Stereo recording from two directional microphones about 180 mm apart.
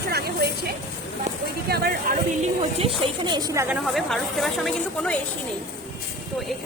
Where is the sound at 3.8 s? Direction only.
Centre (ahead or behind).